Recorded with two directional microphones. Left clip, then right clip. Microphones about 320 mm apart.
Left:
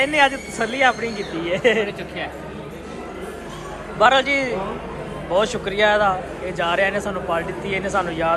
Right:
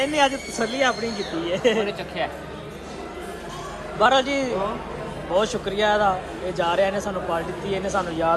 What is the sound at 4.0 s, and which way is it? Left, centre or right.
A man's voice, centre.